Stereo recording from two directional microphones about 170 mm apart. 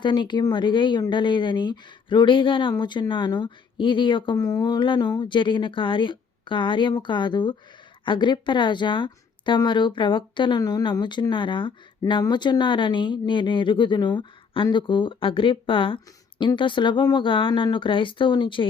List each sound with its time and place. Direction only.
0.0 s speech: 25° left (ahead or behind)